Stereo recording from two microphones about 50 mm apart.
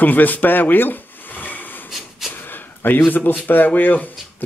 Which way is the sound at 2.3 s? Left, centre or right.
Left.